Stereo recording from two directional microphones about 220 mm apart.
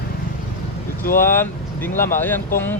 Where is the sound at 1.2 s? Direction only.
10° left (ahead or behind).